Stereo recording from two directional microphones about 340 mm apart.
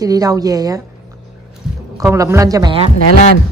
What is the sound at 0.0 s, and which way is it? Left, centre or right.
Speech, centre.